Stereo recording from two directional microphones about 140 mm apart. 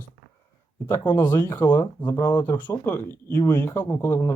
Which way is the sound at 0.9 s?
20° left (ahead or behind).